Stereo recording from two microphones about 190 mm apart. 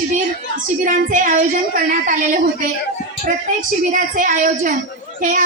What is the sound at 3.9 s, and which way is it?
A woman's voice, 45° right (ahead or behind).